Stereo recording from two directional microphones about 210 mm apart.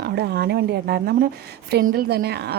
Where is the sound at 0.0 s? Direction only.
50° right (ahead or behind).